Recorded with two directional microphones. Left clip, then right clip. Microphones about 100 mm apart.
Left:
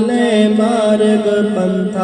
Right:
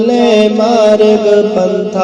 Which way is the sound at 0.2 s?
25° right (ahead or behind).